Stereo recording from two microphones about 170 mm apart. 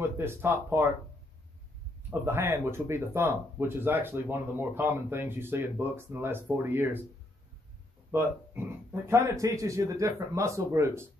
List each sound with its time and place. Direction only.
0.0 s speech: 15° right (ahead or behind)
2.0 s speech: 15° right (ahead or behind)
8.1 s speech: 15° right (ahead or behind)